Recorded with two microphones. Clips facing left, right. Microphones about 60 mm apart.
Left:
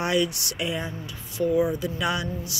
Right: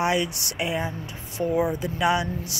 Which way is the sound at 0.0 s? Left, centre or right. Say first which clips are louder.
Even; centre.